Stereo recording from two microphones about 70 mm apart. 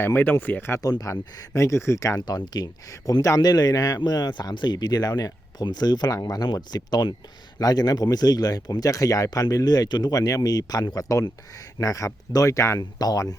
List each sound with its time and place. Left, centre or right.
0.1 s speech: left
0.8 s speech: left
1.5 s speech: left
2.2 s speech: left
2.9 s speech: left
4.0 s speech: left
6.2 s speech: left
7.6 s speech: left
11.1 s speech: left
13.0 s speech: left